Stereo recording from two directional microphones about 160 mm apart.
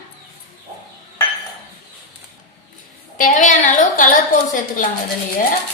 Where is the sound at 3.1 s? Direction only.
55° left (ahead or behind).